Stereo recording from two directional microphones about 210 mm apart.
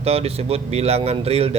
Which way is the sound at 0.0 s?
30° right (ahead or behind).